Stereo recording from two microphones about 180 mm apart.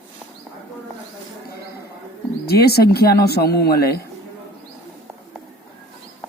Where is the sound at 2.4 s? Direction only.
60° left (ahead or behind).